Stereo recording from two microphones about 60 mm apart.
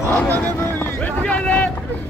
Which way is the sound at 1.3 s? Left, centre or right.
Left.